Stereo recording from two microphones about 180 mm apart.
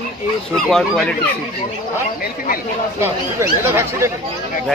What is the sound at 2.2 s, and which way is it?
Speech, 55° left (ahead or behind).